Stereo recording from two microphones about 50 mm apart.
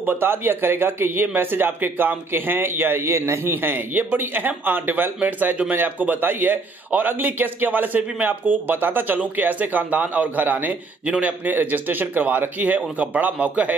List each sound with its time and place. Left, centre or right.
0.0 s a man's voice: right
11.1 s a man's voice: right
11.4 s a man's voice: right